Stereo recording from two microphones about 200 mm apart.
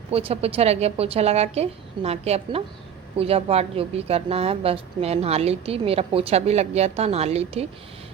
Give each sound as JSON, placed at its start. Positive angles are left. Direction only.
{"t": 0.1, "sound": "a woman's voice", "side_deg": -30}